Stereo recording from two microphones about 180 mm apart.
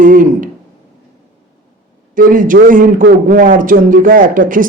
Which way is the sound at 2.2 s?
50° right (ahead or behind).